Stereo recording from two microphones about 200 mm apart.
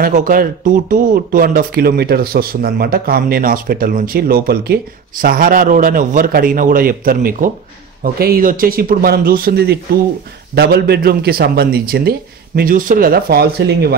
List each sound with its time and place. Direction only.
0.0 s speech: 45° right (ahead or behind)